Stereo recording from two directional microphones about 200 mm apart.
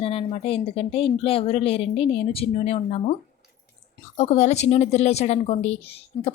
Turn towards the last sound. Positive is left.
turn(degrees=30)  # may be behind; listen again after turning